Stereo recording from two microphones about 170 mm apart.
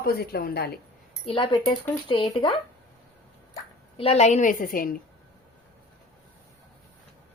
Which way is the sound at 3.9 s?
35° left (ahead or behind).